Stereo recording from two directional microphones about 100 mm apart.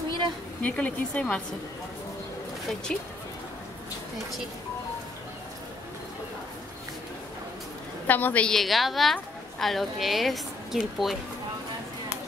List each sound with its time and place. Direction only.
0.6 s speech: 15° left (ahead or behind)
8.1 s speech: 15° left (ahead or behind)
8.5 s a woman's voice: centre (ahead or behind)